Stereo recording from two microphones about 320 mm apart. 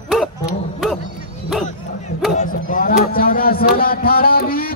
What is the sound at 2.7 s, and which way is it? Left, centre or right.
Speech, left.